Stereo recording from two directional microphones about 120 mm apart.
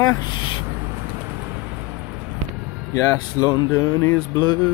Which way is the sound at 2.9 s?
25° left (ahead or behind).